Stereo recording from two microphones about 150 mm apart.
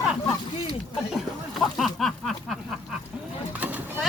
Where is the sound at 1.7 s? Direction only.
Centre (ahead or behind).